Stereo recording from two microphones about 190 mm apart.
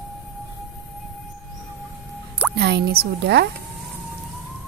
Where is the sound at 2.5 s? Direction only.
60° right (ahead or behind).